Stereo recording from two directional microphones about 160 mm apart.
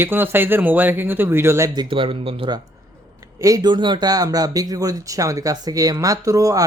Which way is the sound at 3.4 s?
25° right (ahead or behind).